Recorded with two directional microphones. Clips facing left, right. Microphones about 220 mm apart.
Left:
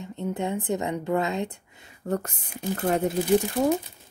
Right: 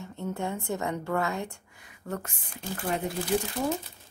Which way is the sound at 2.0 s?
40° left (ahead or behind).